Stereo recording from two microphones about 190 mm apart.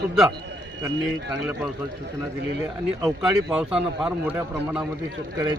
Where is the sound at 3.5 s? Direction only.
5° right (ahead or behind).